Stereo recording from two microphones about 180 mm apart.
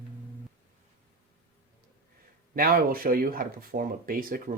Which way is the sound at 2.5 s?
50° right (ahead or behind).